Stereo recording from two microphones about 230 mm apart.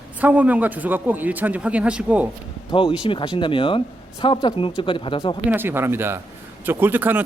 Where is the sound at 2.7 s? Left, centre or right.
Left.